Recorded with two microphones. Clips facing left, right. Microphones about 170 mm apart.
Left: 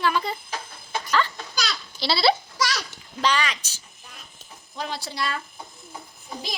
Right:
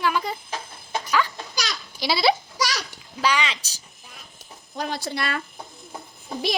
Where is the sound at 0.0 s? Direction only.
10° right (ahead or behind).